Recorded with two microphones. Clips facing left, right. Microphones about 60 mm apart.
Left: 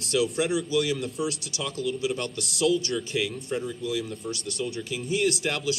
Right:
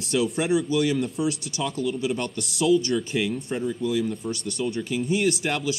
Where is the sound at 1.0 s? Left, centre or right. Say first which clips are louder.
Right 3 dB; centre.